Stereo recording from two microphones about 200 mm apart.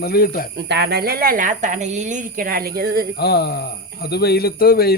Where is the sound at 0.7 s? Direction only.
55° right (ahead or behind).